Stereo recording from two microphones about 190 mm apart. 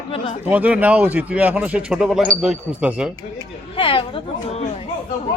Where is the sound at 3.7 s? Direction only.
30° left (ahead or behind).